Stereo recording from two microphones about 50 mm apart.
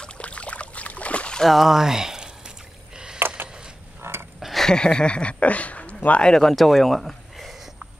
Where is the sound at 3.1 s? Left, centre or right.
Right.